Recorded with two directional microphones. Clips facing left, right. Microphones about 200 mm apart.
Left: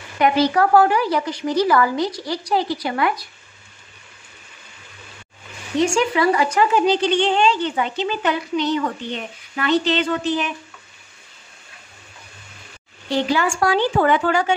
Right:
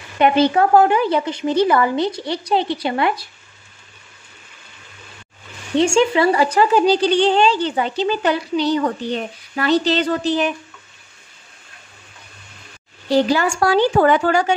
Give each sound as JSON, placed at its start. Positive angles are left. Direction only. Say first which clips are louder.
{"t": 0.2, "sound": "a woman's voice", "louder": "right 2 dB", "side_deg": -25}
{"t": 5.8, "sound": "speech", "louder": "right 3 dB", "side_deg": -25}
{"t": 13.1, "sound": "speech", "louder": "right 4 dB", "side_deg": -35}